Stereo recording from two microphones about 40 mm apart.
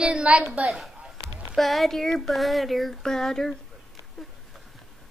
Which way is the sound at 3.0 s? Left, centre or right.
Centre.